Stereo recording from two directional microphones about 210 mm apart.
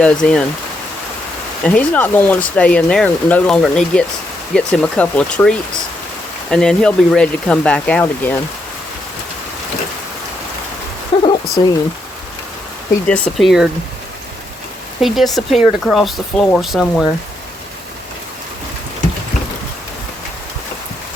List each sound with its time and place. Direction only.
0.0 s speech: 5° left (ahead or behind)
1.6 s speech: 5° left (ahead or behind)
11.1 s a sound: 25° left (ahead or behind)
13.1 s speech: 5° left (ahead or behind)
15.0 s speech: centre (ahead or behind)